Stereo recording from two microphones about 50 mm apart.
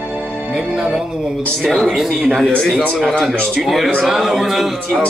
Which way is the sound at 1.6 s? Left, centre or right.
Centre.